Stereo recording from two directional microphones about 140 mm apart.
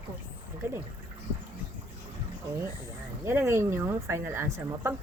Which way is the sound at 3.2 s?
20° right (ahead or behind).